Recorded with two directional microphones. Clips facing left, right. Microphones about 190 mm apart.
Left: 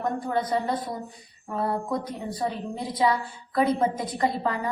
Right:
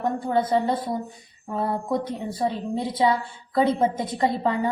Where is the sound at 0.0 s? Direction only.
25° right (ahead or behind).